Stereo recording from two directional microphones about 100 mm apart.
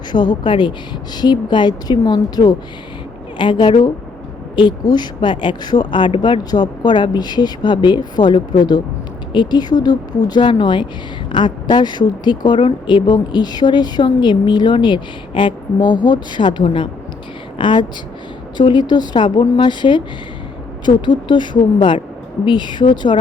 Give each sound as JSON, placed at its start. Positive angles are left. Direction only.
{"t": 0.1, "sound": "speech", "side_deg": 45}